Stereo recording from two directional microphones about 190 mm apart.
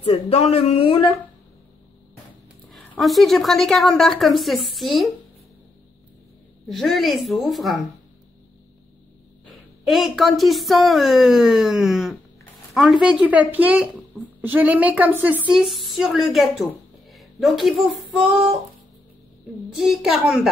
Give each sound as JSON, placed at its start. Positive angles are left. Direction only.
{"t": 0.0, "sound": "speech", "side_deg": 30}
{"t": 2.7, "sound": "a woman's voice", "side_deg": 0}
{"t": 6.7, "sound": "a woman's voice", "side_deg": 0}
{"t": 9.8, "sound": "a woman's voice", "side_deg": 0}
{"t": 19.7, "sound": "a woman's voice", "side_deg": 0}